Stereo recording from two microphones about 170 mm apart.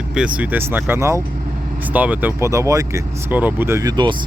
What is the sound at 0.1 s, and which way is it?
Speech, 5° right (ahead or behind).